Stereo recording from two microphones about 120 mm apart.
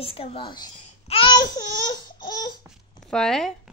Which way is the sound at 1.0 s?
50° left (ahead or behind).